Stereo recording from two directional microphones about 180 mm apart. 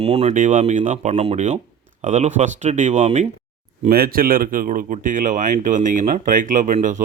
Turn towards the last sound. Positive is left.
turn(degrees=-45)  # may be behind; listen again after turning